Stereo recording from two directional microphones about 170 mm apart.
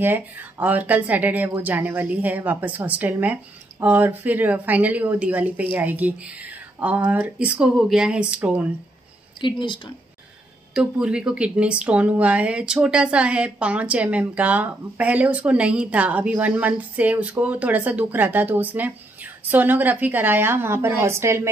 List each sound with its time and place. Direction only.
0.0 s speech: 10° right (ahead or behind)
9.4 s a woman's voice: 30° left (ahead or behind)
10.7 s speech: 5° right (ahead or behind)